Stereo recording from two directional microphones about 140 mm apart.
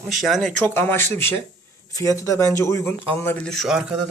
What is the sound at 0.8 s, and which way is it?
Speech, 15° left (ahead or behind).